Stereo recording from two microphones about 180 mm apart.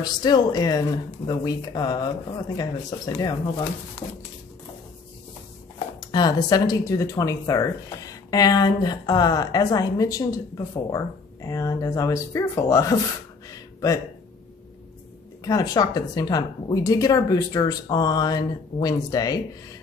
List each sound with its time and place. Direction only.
0.0 s a woman's voice: 20° left (ahead or behind)
5.9 s a woman's voice: 20° left (ahead or behind)
13.5 s a sound: 20° left (ahead or behind)
15.4 s a woman's voice: 20° left (ahead or behind)